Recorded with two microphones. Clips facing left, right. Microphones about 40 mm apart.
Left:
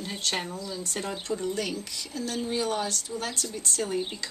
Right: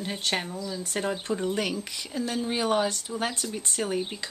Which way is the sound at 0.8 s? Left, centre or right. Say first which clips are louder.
Right 5 dB; right.